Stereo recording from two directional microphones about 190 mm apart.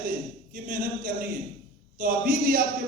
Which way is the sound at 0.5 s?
45° right (ahead or behind).